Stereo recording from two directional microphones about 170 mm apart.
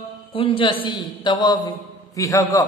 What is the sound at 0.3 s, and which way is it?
A man's voice, 30° left (ahead or behind).